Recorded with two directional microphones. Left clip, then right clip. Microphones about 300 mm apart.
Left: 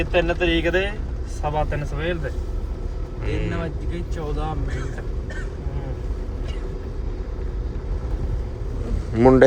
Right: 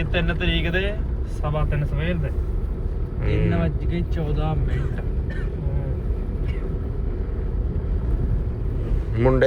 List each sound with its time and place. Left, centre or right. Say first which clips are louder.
0.0 s speech: left 5 dB; left
3.2 s speech: right 2 dB; centre
9.1 s speech: left 6 dB; left